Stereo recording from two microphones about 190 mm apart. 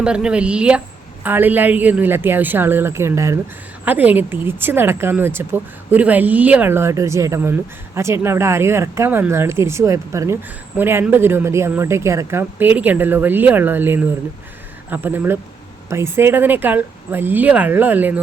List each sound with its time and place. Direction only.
0.0 s speech: 5° right (ahead or behind)